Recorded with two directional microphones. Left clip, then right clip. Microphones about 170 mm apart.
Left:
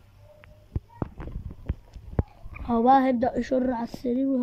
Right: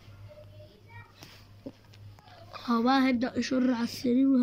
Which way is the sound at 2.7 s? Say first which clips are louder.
Left 6 dB; 35° left (ahead or behind).